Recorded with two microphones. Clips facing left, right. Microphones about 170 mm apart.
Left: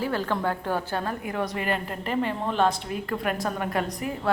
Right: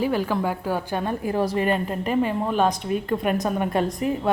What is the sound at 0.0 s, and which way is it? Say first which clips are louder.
A woman's voice: right 4 dB; 15° right (ahead or behind).